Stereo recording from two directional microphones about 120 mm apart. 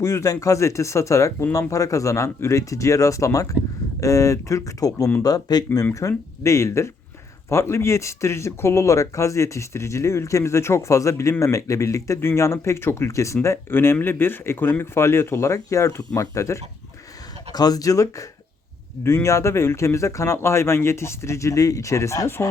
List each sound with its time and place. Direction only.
0.0 s speech: 25° left (ahead or behind)